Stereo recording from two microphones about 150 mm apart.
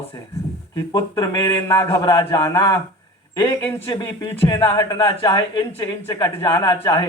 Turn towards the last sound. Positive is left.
turn(degrees=25)  # may be behind; listen again after turning